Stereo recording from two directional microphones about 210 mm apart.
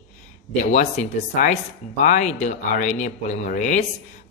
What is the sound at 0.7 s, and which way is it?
Speech, 35° left (ahead or behind).